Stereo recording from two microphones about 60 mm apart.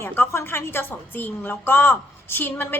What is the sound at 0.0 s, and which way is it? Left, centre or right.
A woman's voice, left.